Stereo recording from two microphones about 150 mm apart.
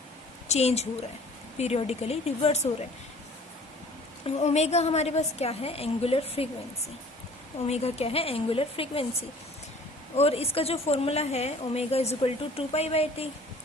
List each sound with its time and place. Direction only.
0.4 s a woman's voice: 45° left (ahead or behind)
4.4 s a woman's voice: 45° left (ahead or behind)
7.7 s a woman's voice: 45° left (ahead or behind)
10.2 s a woman's voice: 40° left (ahead or behind)